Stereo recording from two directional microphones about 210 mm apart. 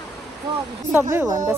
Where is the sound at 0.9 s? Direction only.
10° right (ahead or behind).